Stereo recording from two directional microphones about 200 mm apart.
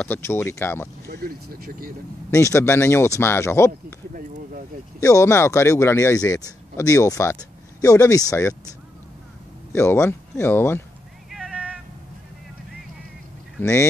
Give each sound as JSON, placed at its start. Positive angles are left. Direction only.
{"t": 0.0, "sound": "speech", "side_deg": 10}
{"t": 1.0, "sound": "speech", "side_deg": -50}
{"t": 2.3, "sound": "speech", "side_deg": 15}
{"t": 5.0, "sound": "speech", "side_deg": 15}
{"t": 9.7, "sound": "speech", "side_deg": 10}
{"t": 11.2, "sound": "a sound", "side_deg": 0}
{"t": 13.6, "sound": "speech", "side_deg": 15}